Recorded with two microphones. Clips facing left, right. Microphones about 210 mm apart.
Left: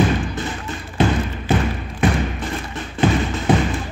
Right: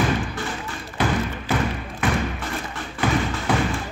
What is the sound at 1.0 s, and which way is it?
Thump, 25° left (ahead or behind).